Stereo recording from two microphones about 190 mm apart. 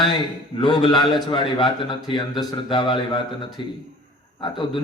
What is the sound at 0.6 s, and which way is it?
A man's voice, 25° left (ahead or behind).